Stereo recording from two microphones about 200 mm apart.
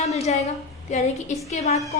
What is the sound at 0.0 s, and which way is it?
A woman's voice, 35° left (ahead or behind).